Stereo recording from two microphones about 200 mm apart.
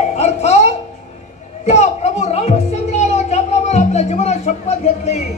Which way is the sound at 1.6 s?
35° left (ahead or behind).